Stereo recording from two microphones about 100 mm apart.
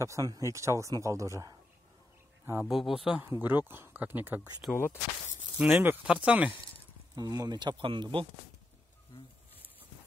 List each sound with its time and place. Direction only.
0.0 s speech: 30° right (ahead or behind)
2.6 s speech: centre (ahead or behind)
3.2 s speech: 20° right (ahead or behind)
4.6 s speech: 5° right (ahead or behind)
5.6 s speech: 15° right (ahead or behind)
7.2 s speech: 40° right (ahead or behind); by 8.3 s 60° right (ahead or behind)